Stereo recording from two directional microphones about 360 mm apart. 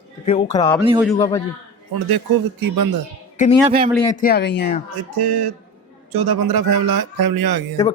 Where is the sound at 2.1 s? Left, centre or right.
Right.